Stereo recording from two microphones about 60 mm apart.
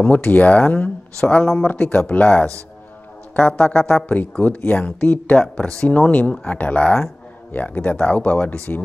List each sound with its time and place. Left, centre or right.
0.0 s speech: left
4.1 s speech: left
5.4 s speech: centre